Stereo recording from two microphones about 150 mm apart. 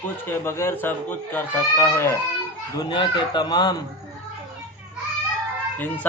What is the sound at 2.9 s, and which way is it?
Speech, 30° left (ahead or behind).